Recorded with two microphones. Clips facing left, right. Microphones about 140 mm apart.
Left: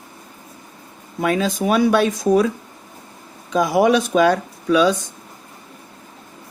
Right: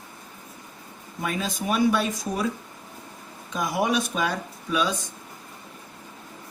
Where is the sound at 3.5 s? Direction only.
90° left.